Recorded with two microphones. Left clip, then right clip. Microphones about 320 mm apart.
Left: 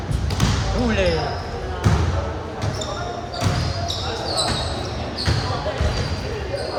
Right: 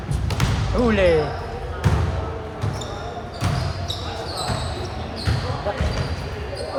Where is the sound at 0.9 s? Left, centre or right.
Centre.